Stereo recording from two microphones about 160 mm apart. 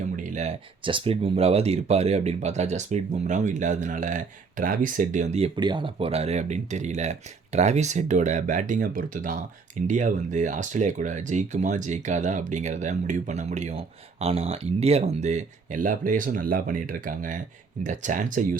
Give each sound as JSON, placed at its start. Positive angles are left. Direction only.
{"t": 0.2, "sound": "a sound", "side_deg": -45}
{"t": 0.8, "sound": "speech", "side_deg": -30}
{"t": 5.5, "sound": "speech", "side_deg": -30}